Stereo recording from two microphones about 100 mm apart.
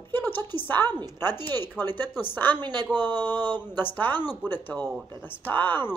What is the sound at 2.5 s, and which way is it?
Speech, 45° right (ahead or behind).